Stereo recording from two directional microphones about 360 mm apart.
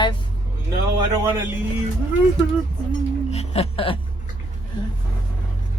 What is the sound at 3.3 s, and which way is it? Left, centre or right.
Singing bowl, centre.